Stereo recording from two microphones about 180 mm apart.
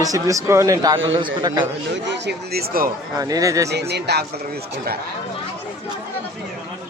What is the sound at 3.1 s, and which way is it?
Speech, 20° right (ahead or behind).